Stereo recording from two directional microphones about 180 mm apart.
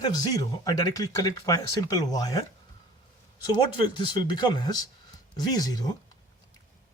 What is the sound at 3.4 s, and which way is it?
Speech, 25° left (ahead or behind).